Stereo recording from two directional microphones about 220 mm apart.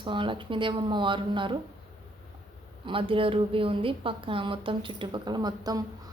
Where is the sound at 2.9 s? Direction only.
25° right (ahead or behind).